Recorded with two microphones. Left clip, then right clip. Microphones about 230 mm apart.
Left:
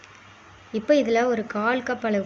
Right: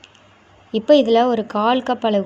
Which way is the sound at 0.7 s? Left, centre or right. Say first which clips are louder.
Right 7 dB; right.